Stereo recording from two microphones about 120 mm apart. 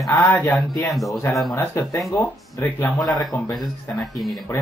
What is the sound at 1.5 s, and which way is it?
Speech, 20° left (ahead or behind).